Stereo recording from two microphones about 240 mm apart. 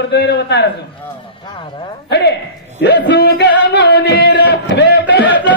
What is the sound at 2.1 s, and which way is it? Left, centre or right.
Speech, left.